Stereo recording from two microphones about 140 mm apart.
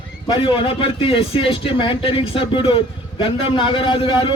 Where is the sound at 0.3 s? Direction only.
35° left (ahead or behind).